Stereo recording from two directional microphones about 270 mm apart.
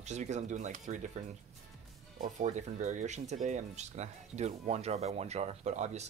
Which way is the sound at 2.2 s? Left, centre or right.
Right.